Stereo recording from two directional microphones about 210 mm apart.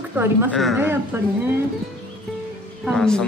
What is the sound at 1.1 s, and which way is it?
Speech, 10° right (ahead or behind).